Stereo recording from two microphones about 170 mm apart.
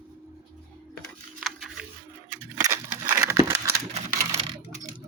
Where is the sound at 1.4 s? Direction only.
Centre (ahead or behind).